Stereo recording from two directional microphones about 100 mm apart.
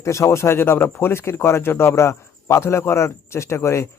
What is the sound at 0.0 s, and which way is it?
Speech, 30° left (ahead or behind).